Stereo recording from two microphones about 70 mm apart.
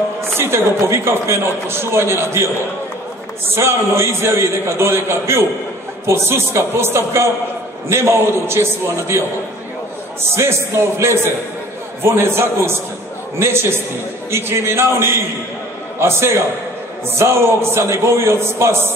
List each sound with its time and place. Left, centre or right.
0.3 s a man's voice: right
3.5 s a man's voice: right
10.3 s a man's voice: right